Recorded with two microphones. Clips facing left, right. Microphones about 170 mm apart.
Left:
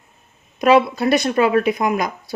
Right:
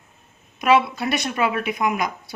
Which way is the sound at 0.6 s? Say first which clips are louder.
Left 4 dB; 40° left (ahead or behind).